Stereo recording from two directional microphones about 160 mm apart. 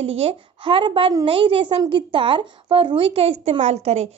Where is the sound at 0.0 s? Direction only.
40° right (ahead or behind).